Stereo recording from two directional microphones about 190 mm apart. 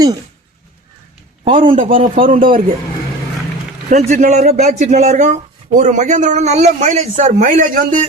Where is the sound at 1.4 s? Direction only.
40° right (ahead or behind).